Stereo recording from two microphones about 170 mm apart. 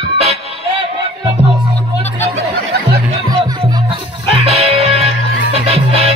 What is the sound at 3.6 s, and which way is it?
Music, 25° right (ahead or behind).